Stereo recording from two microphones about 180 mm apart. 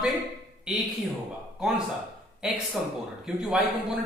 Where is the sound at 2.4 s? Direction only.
5° right (ahead or behind).